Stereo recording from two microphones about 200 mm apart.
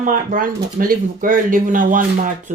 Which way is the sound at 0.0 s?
40° right (ahead or behind).